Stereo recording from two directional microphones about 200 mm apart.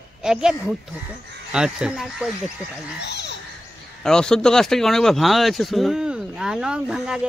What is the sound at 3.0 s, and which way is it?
Speech, 60° left (ahead or behind).